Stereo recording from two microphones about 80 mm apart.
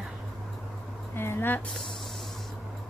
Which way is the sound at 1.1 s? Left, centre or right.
Left.